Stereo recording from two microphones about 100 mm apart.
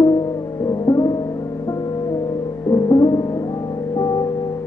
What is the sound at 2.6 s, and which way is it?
Music, 40° left (ahead or behind).